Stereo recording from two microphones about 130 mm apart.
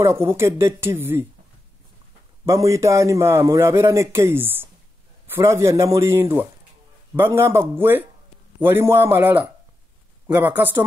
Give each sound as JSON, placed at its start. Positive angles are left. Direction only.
{"t": 0.0, "sound": "a man's voice", "side_deg": -20}
{"t": 2.4, "sound": "a man's voice", "side_deg": -20}